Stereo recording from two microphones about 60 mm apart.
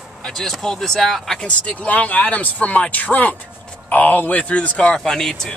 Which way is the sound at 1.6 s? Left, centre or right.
Left.